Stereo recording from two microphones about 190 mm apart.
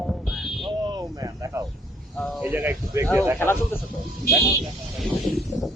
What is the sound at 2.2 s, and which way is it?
Speech, centre (ahead or behind).